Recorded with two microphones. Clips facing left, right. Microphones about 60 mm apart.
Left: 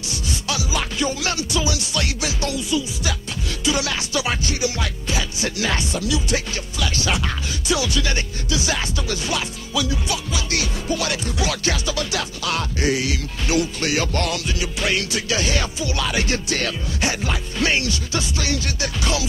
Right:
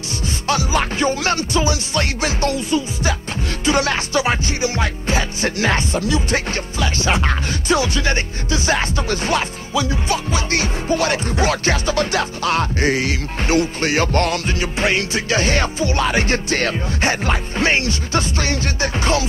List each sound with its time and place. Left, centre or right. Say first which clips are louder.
0.5 s music: right 7 dB; right